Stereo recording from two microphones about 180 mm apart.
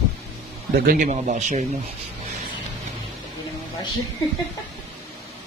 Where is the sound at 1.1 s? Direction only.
40° right (ahead or behind).